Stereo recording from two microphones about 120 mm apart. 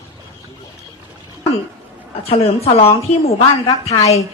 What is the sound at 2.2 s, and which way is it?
Speech, 55° left (ahead or behind).